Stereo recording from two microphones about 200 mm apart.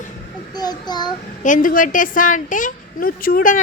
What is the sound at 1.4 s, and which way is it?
Speech, 40° left (ahead or behind).